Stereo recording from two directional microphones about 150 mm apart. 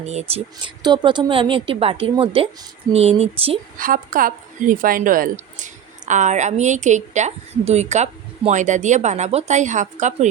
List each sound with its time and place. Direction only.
0.0 s a woman's voice: 45° right (ahead or behind)
0.8 s a woman's voice: 30° right (ahead or behind)
3.8 s a woman's voice: 65° right (ahead or behind)